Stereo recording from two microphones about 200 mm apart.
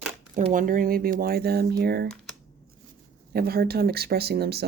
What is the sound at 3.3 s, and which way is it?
Speech, 50° right (ahead or behind).